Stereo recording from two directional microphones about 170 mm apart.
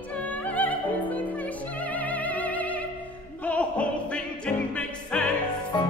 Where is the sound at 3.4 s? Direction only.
10° left (ahead or behind).